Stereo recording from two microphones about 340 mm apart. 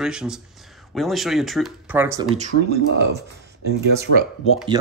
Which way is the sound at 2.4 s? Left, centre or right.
Right.